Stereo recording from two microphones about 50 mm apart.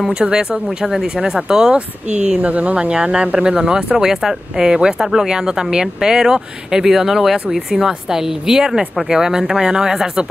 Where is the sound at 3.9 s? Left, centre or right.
Centre.